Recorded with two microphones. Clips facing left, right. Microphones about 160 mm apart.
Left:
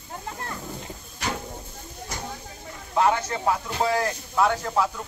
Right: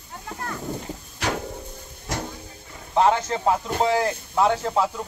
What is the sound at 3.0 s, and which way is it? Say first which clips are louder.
Speech: right 3 dB; 25° right (ahead or behind).